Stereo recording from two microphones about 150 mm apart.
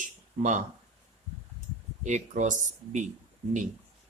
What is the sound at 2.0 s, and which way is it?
Speech, 55° right (ahead or behind).